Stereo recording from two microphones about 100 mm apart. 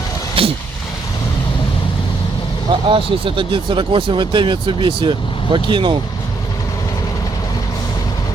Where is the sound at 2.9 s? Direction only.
60° right (ahead or behind).